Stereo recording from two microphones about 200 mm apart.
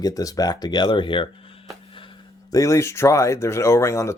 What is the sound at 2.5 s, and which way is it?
Speech, 15° left (ahead or behind).